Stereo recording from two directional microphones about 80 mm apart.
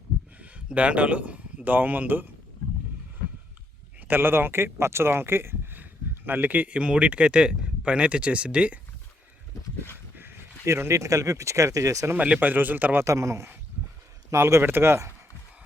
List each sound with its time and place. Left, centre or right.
0.3 s speech: centre
4.1 s speech: right
9.8 s speech: right
12.1 s speech: centre
13.1 s speech: right